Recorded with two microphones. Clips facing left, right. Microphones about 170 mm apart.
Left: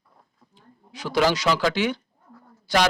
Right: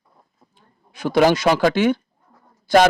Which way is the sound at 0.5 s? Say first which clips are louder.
Left 3 dB; 50° right (ahead or behind).